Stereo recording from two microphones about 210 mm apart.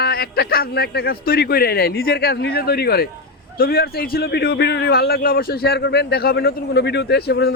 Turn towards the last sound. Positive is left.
turn(degrees=50)  # may be behind; listen again after turning